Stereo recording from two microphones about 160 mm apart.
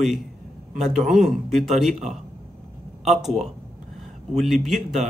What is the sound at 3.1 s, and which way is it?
Speech, centre (ahead or behind).